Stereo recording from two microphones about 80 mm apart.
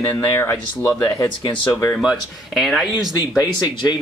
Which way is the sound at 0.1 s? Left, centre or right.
Left.